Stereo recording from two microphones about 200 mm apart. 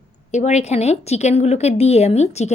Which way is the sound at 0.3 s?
35° left (ahead or behind).